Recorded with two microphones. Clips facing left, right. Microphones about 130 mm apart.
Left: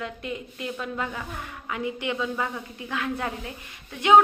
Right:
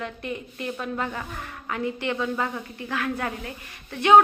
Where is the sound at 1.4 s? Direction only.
15° left (ahead or behind).